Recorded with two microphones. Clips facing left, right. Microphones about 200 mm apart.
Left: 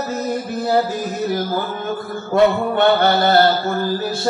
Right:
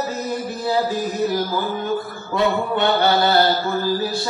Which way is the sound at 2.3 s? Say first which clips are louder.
Left 5 dB; 50° left (ahead or behind).